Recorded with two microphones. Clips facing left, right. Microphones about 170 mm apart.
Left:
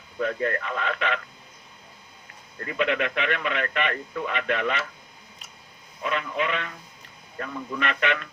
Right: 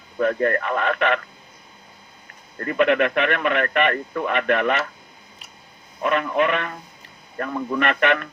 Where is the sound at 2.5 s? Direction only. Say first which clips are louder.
Right 7 dB; 55° right (ahead or behind).